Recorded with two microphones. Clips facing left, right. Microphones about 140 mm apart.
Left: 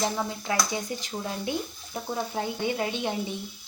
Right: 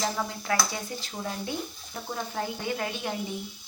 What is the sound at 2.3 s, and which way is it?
Speech, 20° left (ahead or behind).